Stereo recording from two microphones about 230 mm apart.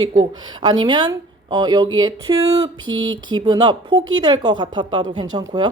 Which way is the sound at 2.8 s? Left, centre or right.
Right.